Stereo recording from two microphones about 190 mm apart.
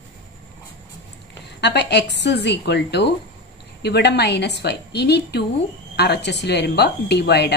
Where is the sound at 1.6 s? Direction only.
65° left (ahead or behind).